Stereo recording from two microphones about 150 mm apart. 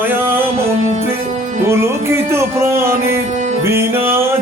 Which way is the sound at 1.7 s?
15° right (ahead or behind).